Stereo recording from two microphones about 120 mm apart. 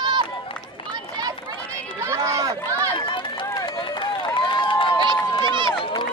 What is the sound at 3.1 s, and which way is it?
Run, 45° left (ahead or behind).